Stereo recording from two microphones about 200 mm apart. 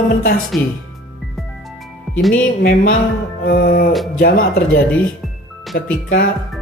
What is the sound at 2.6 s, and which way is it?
Speech, 50° left (ahead or behind).